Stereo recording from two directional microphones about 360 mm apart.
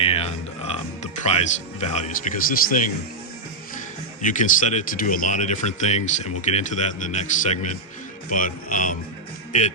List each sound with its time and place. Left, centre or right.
0.0 s speech: centre
4.2 s speech: left